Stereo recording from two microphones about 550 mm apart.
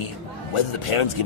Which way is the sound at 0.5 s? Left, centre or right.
Left.